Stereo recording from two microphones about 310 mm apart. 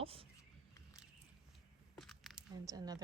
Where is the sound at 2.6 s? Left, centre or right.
Centre.